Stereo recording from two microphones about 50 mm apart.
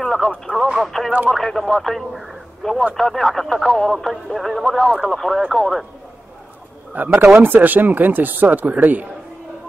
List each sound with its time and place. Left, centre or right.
0.0 s radio: centre
0.7 s speech: centre
2.6 s speech: centre
7.0 s speech: right